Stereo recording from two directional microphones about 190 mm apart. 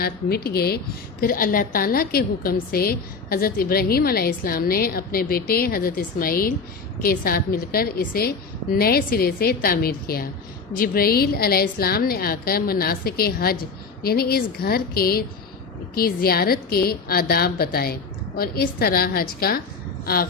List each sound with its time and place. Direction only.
0.0 s a woman's voice: 55° left (ahead or behind)